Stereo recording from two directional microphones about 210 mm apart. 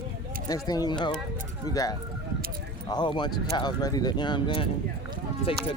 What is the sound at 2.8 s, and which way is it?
Speech, 20° left (ahead or behind).